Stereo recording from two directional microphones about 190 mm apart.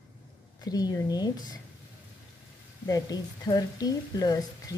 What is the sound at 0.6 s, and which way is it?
A woman's voice, 20° left (ahead or behind).